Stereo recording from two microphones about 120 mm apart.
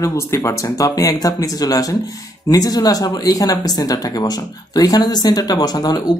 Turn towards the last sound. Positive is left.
turn(degrees=35)  # may be behind; listen again after turning